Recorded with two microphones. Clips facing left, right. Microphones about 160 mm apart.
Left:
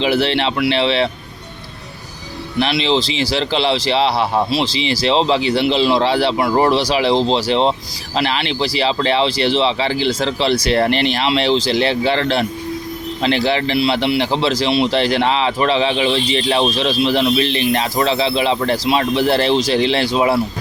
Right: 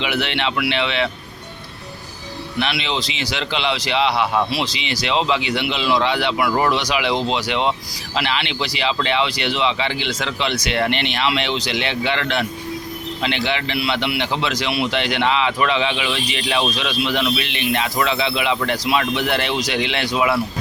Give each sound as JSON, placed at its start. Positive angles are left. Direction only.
{"t": 0.0, "sound": "speech", "side_deg": 35}
{"t": 2.6, "sound": "speech", "side_deg": 35}